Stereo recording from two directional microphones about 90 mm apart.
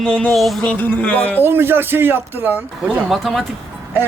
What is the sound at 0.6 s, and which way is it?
Speech, 15° left (ahead or behind).